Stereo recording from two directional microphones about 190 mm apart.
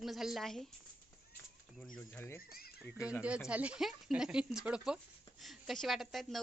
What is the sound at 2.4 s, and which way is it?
Speech, 50° left (ahead or behind).